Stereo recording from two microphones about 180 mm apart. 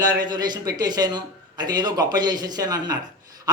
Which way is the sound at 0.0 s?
20° right (ahead or behind).